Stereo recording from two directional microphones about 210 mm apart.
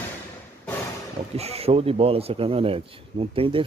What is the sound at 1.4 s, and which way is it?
Speech, 30° right (ahead or behind).